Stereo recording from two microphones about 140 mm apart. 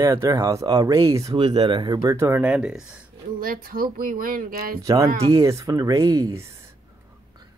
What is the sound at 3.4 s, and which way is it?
Speech, 90° right.